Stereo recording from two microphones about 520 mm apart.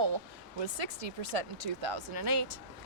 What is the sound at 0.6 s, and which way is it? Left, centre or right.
Speech, right.